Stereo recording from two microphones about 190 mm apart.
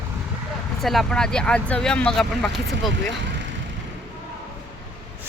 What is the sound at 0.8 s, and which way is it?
Speech, centre (ahead or behind).